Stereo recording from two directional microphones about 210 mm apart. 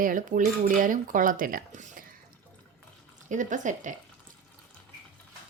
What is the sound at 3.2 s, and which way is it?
Speech, 35° right (ahead or behind).